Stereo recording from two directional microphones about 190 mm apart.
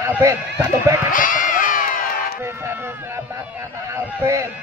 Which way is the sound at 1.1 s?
45° left (ahead or behind).